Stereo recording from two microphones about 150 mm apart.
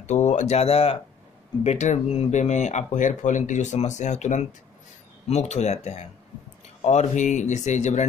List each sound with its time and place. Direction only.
0.0 s speech: 50° left (ahead or behind)